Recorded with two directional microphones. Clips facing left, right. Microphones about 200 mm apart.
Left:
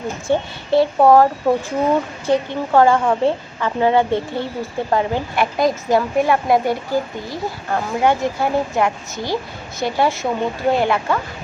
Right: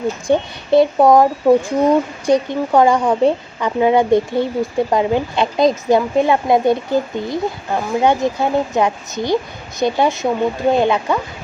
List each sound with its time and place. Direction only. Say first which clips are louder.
0.3 s a woman's voice: right 2 dB; 15° right (ahead or behind)